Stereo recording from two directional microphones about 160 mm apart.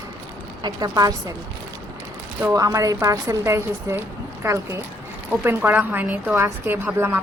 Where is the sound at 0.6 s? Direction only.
25° right (ahead or behind).